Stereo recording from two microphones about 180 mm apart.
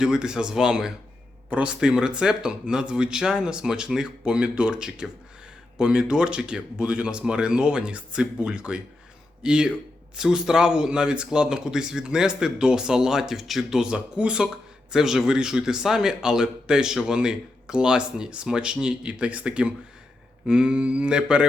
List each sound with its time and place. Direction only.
0.0 s speech: 5° right (ahead or behind)